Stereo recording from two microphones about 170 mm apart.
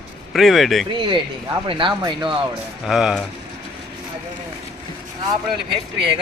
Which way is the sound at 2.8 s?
5° right (ahead or behind).